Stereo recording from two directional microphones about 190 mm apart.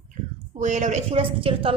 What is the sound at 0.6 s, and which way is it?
A woman's voice, 40° right (ahead or behind).